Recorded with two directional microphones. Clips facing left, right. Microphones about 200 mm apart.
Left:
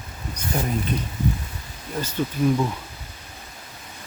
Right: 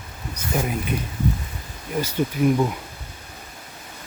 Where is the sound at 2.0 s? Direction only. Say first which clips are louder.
Right 2 dB; 15° right (ahead or behind).